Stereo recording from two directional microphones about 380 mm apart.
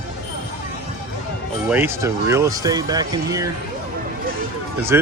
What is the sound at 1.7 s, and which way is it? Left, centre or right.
Speech, centre.